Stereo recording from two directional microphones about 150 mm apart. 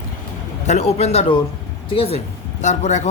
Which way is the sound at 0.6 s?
45° left (ahead or behind).